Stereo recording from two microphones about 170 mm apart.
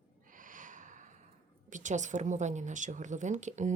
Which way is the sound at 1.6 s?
45° right (ahead or behind).